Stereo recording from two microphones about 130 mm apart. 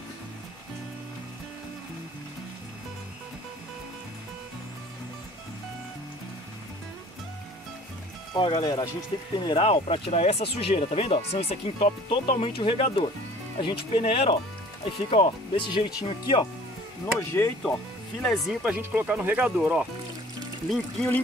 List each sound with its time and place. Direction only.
8.3 s speech: 40° left (ahead or behind)
17.0 s speech: 20° left (ahead or behind)
18.2 s speech: 5° left (ahead or behind)
18.6 s speech: 10° right (ahead or behind)